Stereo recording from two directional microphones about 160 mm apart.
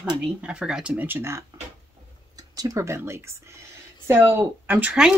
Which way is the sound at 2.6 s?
20° right (ahead or behind).